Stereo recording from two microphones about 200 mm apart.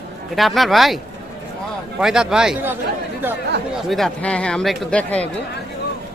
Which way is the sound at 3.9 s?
Centre (ahead or behind).